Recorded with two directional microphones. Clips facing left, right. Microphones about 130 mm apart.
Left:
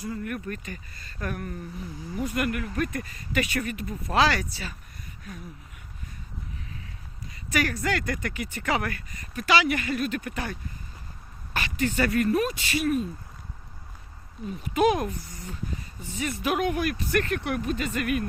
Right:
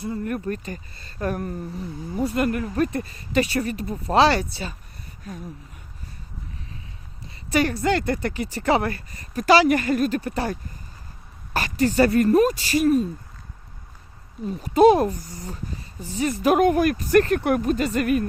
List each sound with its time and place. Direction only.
0.0 s speech: 30° right (ahead or behind)
7.5 s speech: 30° right (ahead or behind)
14.4 s speech: 35° right (ahead or behind)